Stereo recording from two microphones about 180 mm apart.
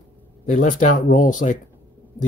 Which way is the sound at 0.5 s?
45° left (ahead or behind).